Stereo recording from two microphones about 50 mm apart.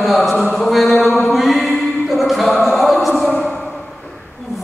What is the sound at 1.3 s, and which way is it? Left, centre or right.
Music, centre.